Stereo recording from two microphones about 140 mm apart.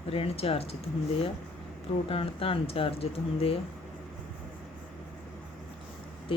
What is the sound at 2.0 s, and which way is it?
Speech, 40° left (ahead or behind).